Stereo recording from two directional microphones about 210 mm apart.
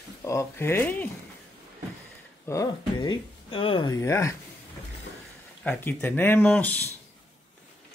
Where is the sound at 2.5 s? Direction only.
20° left (ahead or behind).